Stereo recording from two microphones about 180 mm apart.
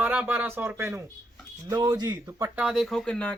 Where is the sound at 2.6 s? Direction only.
Centre (ahead or behind).